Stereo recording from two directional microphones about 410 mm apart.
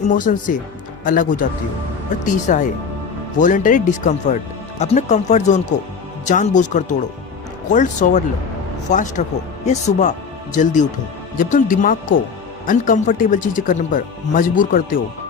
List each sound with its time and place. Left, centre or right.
0.1 s speech: centre
2.5 s speech: centre